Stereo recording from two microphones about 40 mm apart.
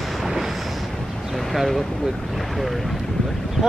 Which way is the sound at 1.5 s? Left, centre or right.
Centre.